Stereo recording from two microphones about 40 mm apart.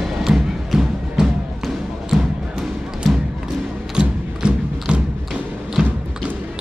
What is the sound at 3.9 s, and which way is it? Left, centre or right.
Music, right.